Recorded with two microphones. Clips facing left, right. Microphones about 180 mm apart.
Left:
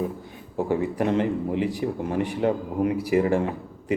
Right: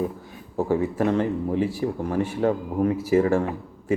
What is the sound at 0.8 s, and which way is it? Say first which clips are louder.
A man's voice: left 1 dB; 20° left (ahead or behind).